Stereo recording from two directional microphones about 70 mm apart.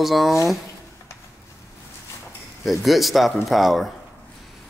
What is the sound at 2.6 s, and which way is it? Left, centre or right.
Speech, centre.